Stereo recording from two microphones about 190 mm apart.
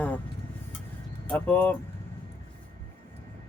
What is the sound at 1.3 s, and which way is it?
Speech, 5° left (ahead or behind).